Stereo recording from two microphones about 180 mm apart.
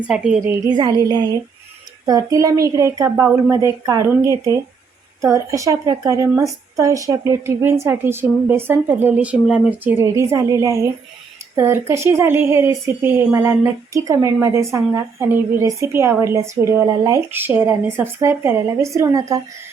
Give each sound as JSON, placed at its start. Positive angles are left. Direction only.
{"t": 0.1, "sound": "a woman's voice", "side_deg": -5}
{"t": 0.6, "sound": "a woman's voice", "side_deg": -25}